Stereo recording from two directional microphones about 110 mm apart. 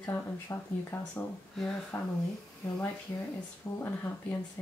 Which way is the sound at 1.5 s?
5° left (ahead or behind).